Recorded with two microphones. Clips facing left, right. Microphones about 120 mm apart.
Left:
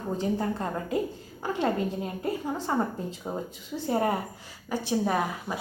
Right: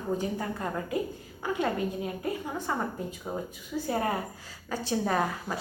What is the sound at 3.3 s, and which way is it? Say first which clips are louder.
A woman's voice: left 1 dB; 15° left (ahead or behind).